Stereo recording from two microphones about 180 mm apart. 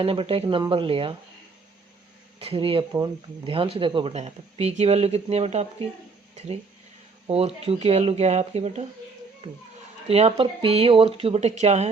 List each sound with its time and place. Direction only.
0.0 s speech: 30° right (ahead or behind)
2.4 s speech: 30° right (ahead or behind)
7.3 s speech: 35° right (ahead or behind)